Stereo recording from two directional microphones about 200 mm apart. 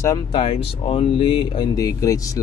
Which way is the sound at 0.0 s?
20° left (ahead or behind).